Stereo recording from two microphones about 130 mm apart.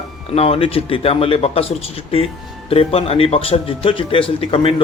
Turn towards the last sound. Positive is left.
turn(degrees=45)  # may be behind; listen again after turning